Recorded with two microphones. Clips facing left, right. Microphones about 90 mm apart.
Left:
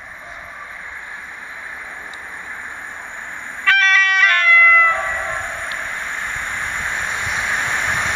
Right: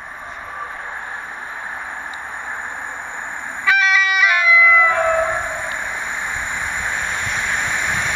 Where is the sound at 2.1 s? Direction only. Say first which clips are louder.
Right 4 dB; 30° right (ahead or behind).